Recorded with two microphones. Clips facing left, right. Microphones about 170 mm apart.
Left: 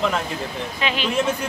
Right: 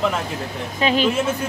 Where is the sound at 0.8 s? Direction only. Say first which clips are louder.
Right 7 dB; 40° right (ahead or behind).